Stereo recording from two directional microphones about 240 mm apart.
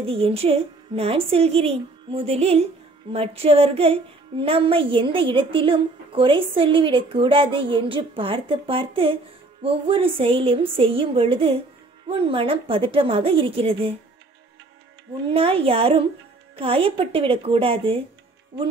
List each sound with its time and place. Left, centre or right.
0.0 s a woman's voice: right
15.2 s a woman's voice: right